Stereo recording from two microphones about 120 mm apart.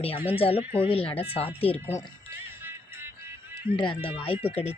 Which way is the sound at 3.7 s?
45° left (ahead or behind).